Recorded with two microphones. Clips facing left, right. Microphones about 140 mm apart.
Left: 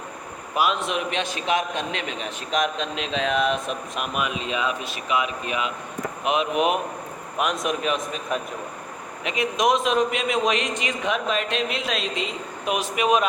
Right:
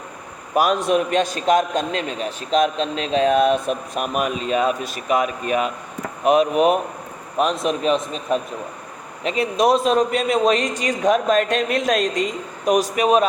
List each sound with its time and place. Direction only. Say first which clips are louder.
0.5 s a man's voice: right 6 dB; 45° right (ahead or behind)